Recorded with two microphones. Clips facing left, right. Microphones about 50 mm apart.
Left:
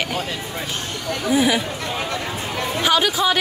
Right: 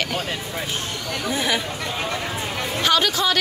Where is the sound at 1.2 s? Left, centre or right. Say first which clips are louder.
Left 5 dB; centre.